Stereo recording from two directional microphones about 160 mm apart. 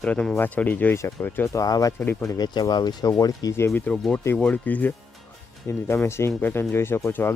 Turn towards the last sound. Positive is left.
turn(degrees=15)  # may be behind; listen again after turning